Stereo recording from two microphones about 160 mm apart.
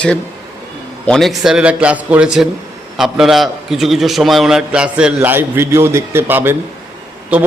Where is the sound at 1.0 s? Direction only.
5° left (ahead or behind).